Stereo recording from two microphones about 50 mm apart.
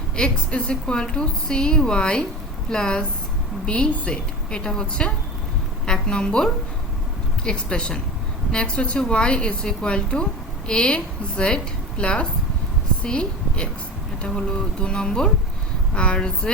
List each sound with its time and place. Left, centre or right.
0.2 s a woman's voice: centre
7.4 s a woman's voice: centre